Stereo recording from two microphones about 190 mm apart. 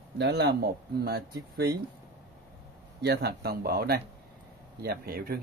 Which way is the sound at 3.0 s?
60° right (ahead or behind).